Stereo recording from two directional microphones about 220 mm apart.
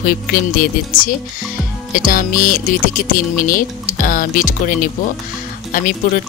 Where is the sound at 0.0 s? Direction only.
40° left (ahead or behind).